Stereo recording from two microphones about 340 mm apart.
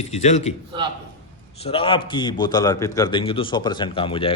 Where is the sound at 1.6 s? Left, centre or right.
Centre.